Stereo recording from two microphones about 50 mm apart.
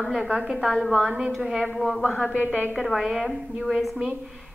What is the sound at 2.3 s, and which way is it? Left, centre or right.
Speech, left.